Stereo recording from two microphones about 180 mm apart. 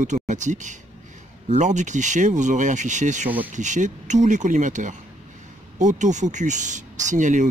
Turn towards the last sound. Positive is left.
turn(degrees=-45)  # may be behind; listen again after turning